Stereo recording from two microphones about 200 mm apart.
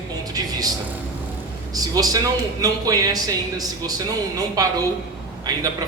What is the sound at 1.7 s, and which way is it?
Speech, 20° right (ahead or behind).